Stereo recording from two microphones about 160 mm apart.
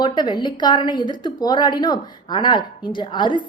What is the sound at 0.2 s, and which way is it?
A woman's voice, 30° left (ahead or behind).